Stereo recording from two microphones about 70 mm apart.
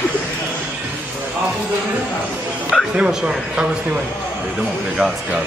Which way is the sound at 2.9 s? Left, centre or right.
Centre.